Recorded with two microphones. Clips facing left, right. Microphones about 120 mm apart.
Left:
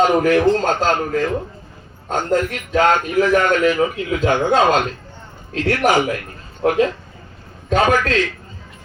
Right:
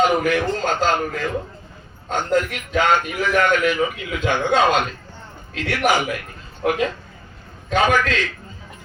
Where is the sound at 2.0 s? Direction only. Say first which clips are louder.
Left 2 dB; 35° left (ahead or behind).